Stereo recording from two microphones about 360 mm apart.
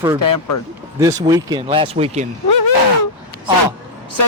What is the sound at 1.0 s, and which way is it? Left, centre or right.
Speech, centre.